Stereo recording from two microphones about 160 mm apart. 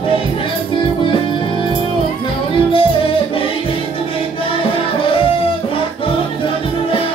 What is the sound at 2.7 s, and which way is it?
Music, 35° left (ahead or behind).